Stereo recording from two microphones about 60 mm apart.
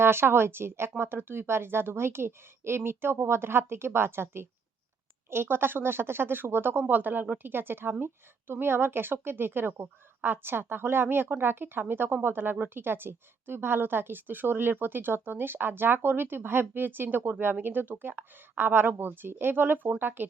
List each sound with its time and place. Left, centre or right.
0.0 s speech: right